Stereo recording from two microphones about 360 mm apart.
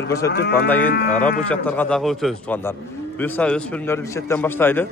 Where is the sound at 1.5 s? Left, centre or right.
Centre.